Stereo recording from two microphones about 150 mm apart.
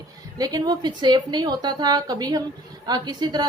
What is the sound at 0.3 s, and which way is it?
A woman's voice, 25° right (ahead or behind).